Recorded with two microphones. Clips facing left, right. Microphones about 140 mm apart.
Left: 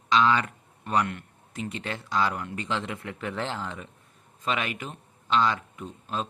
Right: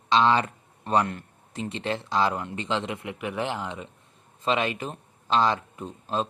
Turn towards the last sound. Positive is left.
turn(degrees=-35)  # may be behind; listen again after turning